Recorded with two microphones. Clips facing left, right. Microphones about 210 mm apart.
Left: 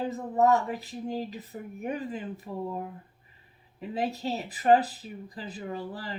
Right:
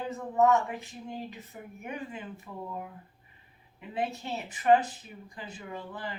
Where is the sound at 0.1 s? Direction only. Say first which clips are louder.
Even; 35° left (ahead or behind).